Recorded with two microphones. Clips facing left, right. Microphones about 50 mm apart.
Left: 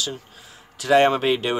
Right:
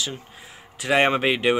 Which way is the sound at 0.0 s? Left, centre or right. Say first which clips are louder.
Left 1 dB; right.